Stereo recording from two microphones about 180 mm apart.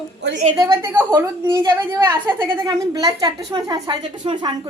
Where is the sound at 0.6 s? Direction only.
15° right (ahead or behind).